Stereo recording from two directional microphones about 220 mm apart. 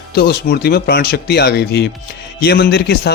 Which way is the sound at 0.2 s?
45° left (ahead or behind).